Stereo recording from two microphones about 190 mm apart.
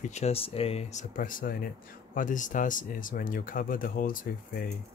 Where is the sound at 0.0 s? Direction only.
35° left (ahead or behind).